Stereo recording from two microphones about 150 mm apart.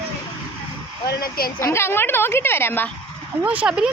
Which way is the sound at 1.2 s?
80° left.